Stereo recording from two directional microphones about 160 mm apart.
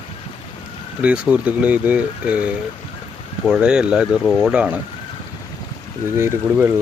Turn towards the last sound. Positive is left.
turn(degrees=-15)  # may be behind; listen again after turning